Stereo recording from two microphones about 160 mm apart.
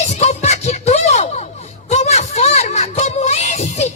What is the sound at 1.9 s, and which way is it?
Music, 45° left (ahead or behind).